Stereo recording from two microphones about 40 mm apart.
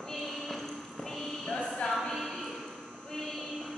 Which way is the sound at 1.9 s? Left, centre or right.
Centre.